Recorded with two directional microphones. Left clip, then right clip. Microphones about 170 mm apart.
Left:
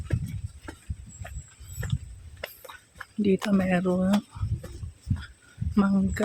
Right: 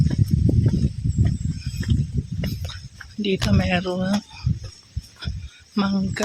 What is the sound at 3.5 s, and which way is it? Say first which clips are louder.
Speech: right 3 dB; centre (ahead or behind).